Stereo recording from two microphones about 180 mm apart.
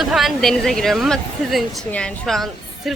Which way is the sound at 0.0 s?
Centre (ahead or behind).